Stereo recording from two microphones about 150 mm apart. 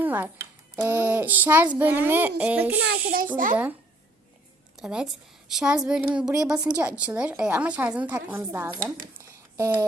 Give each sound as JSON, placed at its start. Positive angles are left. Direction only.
{"t": 0.0, "sound": "a child's voice", "side_deg": -10}
{"t": 2.8, "sound": "a child's voice", "side_deg": -80}
{"t": 3.3, "sound": "a child's voice", "side_deg": -60}
{"t": 4.8, "sound": "a child's voice", "side_deg": -5}
{"t": 9.6, "sound": "a sound", "side_deg": -20}